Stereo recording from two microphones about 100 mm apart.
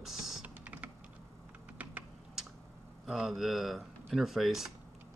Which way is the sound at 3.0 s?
Centre (ahead or behind).